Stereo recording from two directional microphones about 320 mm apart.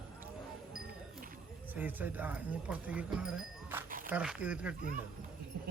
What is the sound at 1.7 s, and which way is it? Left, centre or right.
Speech, centre.